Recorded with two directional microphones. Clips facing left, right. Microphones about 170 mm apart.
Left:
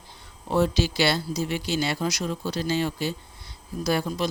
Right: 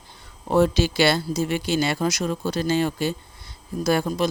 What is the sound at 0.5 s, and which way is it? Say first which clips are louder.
Speech: right 4 dB; 50° right (ahead or behind).